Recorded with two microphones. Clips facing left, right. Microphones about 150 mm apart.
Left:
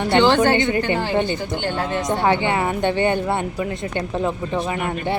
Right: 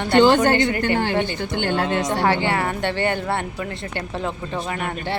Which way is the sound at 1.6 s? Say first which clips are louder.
Right 6 dB; 60° right (ahead or behind).